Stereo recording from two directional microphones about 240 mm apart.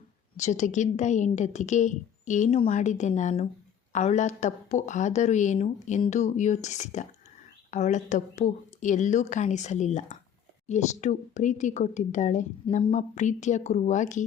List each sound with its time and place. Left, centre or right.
0.3 s a woman's voice: left